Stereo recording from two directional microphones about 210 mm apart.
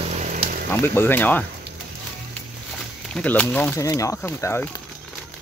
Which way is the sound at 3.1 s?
5° left (ahead or behind).